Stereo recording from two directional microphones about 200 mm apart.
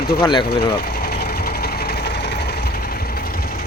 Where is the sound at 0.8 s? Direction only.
50° left (ahead or behind).